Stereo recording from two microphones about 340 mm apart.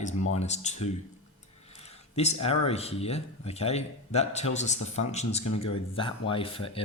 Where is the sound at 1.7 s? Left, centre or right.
Centre.